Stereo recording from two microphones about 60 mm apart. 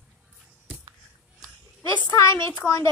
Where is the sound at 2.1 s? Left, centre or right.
Left.